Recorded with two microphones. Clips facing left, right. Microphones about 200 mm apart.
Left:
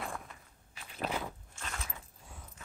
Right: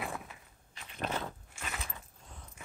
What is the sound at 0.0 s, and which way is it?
Walk, 5° right (ahead or behind).